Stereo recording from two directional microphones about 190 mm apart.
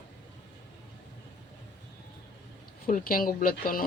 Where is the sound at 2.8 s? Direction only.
45° left (ahead or behind).